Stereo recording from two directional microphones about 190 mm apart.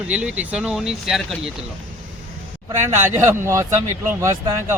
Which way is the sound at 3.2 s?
15° right (ahead or behind).